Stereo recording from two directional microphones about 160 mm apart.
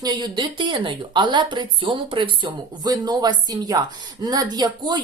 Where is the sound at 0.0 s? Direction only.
25° right (ahead or behind).